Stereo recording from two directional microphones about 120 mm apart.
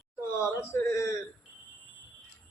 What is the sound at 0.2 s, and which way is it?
Speech, 25° left (ahead or behind).